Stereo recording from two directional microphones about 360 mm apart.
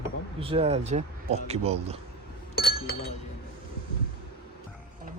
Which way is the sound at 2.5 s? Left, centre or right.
Left.